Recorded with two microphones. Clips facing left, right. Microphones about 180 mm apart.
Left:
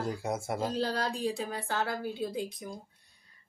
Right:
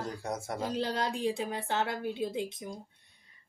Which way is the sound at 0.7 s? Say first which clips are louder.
Even; 20° right (ahead or behind).